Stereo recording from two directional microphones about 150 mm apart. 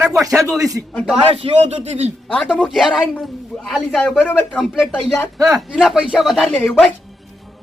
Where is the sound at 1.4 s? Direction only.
45° right (ahead or behind).